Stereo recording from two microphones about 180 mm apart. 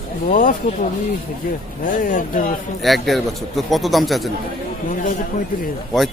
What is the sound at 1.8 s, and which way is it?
Speech, 45° left (ahead or behind).